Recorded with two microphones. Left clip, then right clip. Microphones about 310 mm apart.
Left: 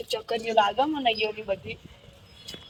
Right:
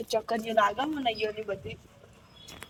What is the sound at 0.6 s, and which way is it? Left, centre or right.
Speech, centre.